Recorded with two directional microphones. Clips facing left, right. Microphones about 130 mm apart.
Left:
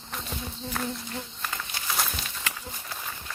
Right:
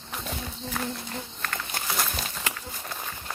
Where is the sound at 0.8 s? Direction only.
Centre (ahead or behind).